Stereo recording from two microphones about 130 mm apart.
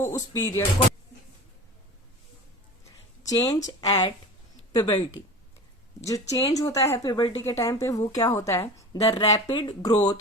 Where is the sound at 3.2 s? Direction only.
30° left (ahead or behind).